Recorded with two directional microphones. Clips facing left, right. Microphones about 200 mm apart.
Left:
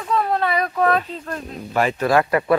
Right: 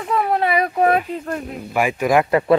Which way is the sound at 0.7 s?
15° right (ahead or behind).